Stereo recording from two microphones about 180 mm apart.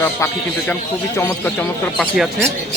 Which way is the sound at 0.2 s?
15° left (ahead or behind).